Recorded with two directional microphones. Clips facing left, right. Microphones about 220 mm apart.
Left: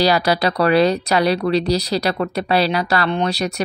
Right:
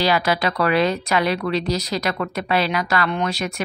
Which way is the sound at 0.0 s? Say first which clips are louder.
Left 3 dB; 35° left (ahead or behind).